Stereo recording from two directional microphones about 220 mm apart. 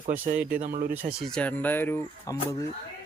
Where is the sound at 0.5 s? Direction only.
40° right (ahead or behind).